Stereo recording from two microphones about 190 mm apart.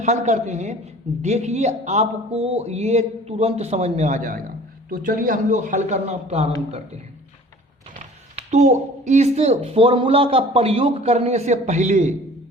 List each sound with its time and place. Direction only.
0.0 s speech: 35° right (ahead or behind)
8.4 s a woman's voice: 35° right (ahead or behind)